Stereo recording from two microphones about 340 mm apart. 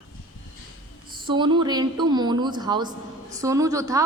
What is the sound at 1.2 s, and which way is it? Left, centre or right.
A woman's voice, centre.